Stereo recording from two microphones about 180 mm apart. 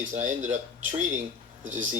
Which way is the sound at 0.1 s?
45° right (ahead or behind).